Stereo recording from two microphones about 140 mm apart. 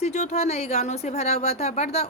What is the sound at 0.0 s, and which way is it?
Speech, 55° left (ahead or behind).